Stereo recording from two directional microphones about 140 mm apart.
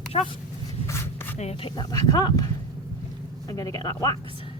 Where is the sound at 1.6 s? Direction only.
30° left (ahead or behind).